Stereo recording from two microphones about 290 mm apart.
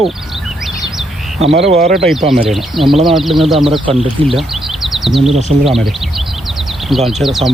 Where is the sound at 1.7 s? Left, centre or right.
Right.